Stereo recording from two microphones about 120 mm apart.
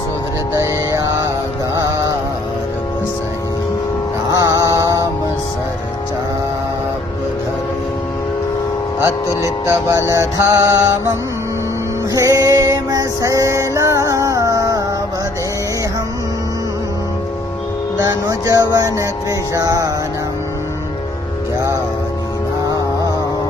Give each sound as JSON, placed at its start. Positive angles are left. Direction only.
{"t": 0.5, "sound": "music", "side_deg": -25}
{"t": 4.3, "sound": "music", "side_deg": -30}
{"t": 9.0, "sound": "speech", "side_deg": 30}
{"t": 9.6, "sound": "music", "side_deg": -25}
{"t": 12.1, "sound": "music", "side_deg": -30}
{"t": 18.3, "sound": "music", "side_deg": -30}